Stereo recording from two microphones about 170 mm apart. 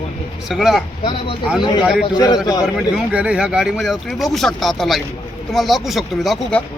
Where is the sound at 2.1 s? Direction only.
25° left (ahead or behind).